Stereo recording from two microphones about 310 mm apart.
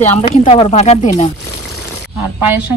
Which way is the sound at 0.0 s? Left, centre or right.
Left.